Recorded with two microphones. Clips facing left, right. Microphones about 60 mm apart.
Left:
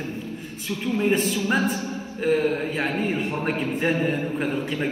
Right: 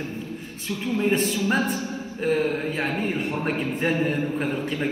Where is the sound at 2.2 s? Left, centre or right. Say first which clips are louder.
Left 1 dB; left.